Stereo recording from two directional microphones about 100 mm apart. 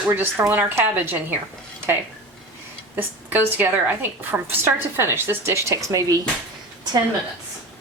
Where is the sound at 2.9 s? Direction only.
15° right (ahead or behind).